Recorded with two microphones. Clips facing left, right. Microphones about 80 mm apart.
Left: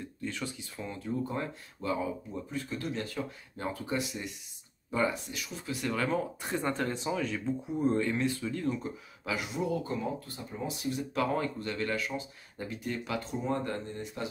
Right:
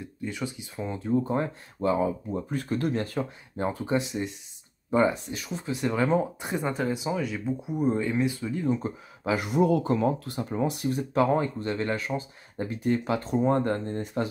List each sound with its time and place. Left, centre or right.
0.0 s speech: centre; by 2.4 s right
2.5 s speech: right; by 8.7 s centre
8.7 s speech: right
9.6 s speech: right
10.9 s speech: right